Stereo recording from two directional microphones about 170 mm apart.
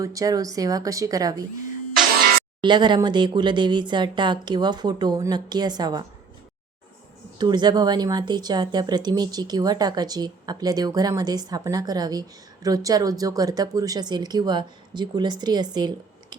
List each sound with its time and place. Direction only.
0.0 s speech: 20° right (ahead or behind)
2.6 s speech: 25° right (ahead or behind)
7.3 s speech: 25° right (ahead or behind)